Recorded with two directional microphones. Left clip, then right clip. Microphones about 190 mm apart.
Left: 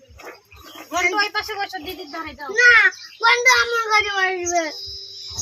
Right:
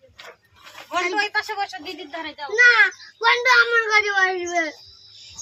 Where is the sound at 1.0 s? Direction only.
20° right (ahead or behind).